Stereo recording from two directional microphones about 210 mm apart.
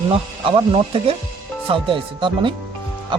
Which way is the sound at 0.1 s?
25° right (ahead or behind).